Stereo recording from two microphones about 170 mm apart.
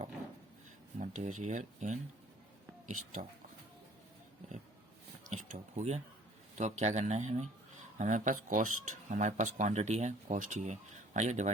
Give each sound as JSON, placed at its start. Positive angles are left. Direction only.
{"t": 0.9, "sound": "speech", "side_deg": -45}
{"t": 5.3, "sound": "speech", "side_deg": -45}